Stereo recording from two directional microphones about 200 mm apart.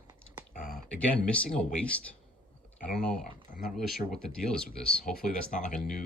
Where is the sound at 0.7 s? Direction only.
5° left (ahead or behind).